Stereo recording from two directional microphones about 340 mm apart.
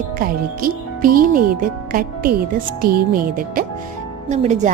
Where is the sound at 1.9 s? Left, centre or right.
Right.